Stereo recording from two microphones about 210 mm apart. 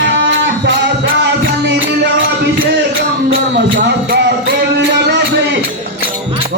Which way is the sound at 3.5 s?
50° right (ahead or behind).